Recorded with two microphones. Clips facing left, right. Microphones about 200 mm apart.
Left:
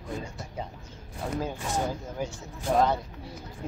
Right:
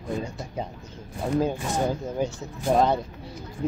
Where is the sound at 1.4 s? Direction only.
20° right (ahead or behind).